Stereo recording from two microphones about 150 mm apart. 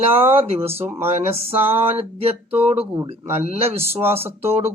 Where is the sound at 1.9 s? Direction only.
40° right (ahead or behind).